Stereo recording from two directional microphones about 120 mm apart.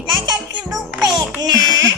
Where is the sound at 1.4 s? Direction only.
35° right (ahead or behind).